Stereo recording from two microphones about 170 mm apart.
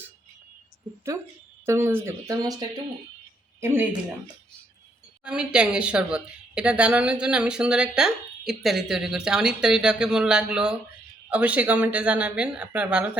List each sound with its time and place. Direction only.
1.6 s speech: 15° right (ahead or behind)
5.2 s speech: 5° right (ahead or behind)